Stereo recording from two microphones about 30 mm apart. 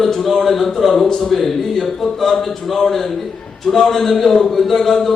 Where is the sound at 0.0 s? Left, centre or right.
Centre.